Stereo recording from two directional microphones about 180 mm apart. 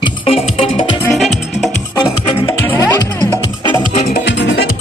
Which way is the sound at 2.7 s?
20° left (ahead or behind).